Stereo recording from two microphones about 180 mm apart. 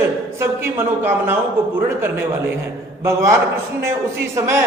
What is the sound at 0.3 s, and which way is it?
A man's voice, 15° right (ahead or behind).